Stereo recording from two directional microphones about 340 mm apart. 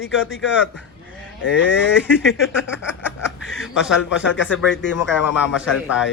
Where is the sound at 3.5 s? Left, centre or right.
Centre.